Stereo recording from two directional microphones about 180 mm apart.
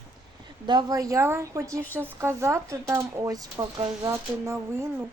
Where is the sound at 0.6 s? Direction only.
25° right (ahead or behind).